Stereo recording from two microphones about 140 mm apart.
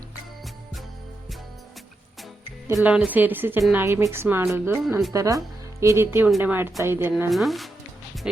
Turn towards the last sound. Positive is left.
turn(degrees=0)  # may be behind; listen again after turning